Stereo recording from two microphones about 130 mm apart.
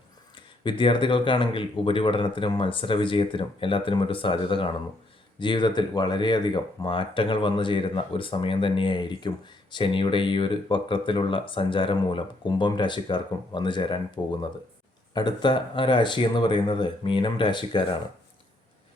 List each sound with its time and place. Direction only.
0.3 s speech: 40° left (ahead or behind)
15.1 s speech: 35° left (ahead or behind)